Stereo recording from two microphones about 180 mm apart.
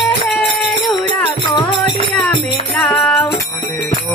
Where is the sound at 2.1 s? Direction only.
Centre (ahead or behind).